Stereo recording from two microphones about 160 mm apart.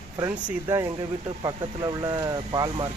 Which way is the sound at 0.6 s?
25° right (ahead or behind).